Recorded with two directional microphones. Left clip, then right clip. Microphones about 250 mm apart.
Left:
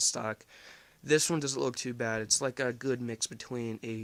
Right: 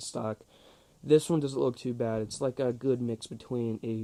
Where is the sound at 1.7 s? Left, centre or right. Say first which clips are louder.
Right 1 dB; centre.